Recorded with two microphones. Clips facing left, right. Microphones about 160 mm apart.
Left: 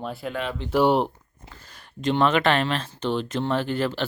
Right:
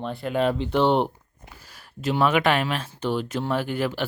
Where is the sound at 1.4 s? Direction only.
10° right (ahead or behind).